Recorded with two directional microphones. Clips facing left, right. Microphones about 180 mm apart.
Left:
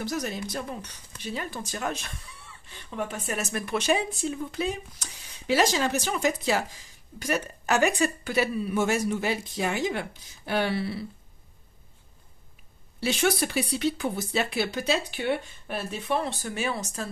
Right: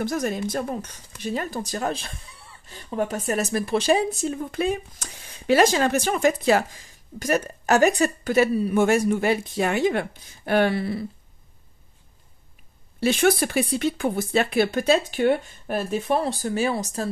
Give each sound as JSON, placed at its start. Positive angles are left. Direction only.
{"t": 0.0, "sound": "speech", "side_deg": -50}
{"t": 8.8, "sound": "speech", "side_deg": -55}
{"t": 13.0, "sound": "speech", "side_deg": -55}